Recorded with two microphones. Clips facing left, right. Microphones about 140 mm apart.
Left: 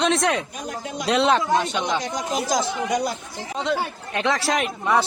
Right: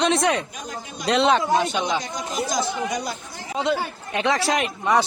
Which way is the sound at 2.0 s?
75° left (ahead or behind).